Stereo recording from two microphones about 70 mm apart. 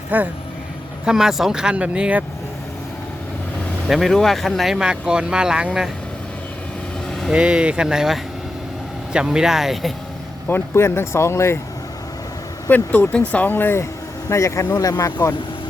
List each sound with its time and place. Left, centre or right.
0.1 s speech: right
1.0 s speech: centre
3.8 s speech: centre
7.3 s speech: centre
10.5 s speech: left
12.6 s speech: left
14.3 s speech: left